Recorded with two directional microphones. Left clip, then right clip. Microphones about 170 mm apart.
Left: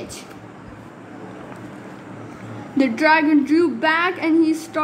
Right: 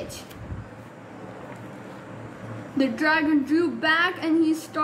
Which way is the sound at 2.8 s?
30° left (ahead or behind).